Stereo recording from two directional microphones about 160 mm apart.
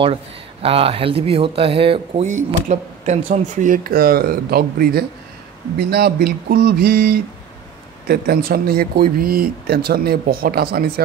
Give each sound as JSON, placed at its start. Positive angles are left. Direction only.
{"t": 0.0, "sound": "speech", "side_deg": -40}